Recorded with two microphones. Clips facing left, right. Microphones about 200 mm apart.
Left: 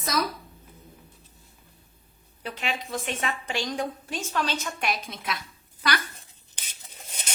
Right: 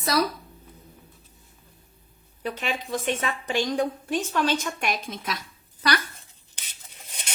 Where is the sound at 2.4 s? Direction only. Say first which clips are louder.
Right 3 dB; 45° right (ahead or behind).